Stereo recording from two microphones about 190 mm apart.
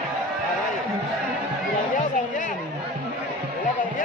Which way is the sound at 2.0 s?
40° left (ahead or behind).